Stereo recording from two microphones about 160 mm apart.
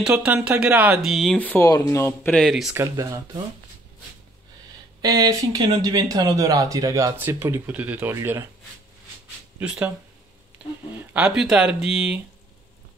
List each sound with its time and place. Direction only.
0.0 s speech: 5° right (ahead or behind); by 2.3 s 15° left (ahead or behind)
2.3 s speech: centre (ahead or behind)
2.7 s speech: 20° right (ahead or behind)
5.0 s speech: 25° right (ahead or behind)
9.6 s speech: 10° right (ahead or behind)
10.6 s a sound: 5° right (ahead or behind)
11.0 s speech: 5° right (ahead or behind)